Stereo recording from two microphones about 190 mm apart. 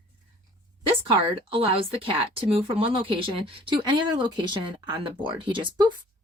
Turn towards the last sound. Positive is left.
turn(degrees=-25)  # may be behind; listen again after turning